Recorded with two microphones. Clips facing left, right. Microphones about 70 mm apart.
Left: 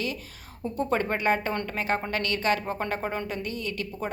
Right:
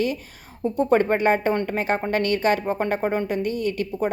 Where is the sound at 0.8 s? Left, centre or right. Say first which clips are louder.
Right 7 dB; right.